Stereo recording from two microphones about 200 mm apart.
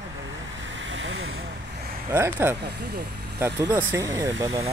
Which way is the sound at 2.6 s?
60° right (ahead or behind).